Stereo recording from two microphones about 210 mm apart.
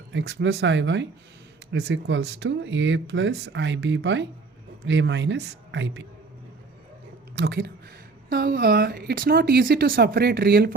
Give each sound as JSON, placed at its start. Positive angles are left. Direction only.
{"t": 0.1, "sound": "speech", "side_deg": -60}
{"t": 7.3, "sound": "speech", "side_deg": -50}